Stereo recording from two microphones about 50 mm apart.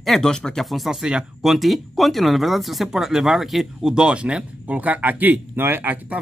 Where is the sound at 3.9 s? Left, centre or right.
Centre; by 6.2 s right.